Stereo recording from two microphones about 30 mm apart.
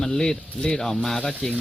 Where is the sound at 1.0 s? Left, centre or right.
Centre.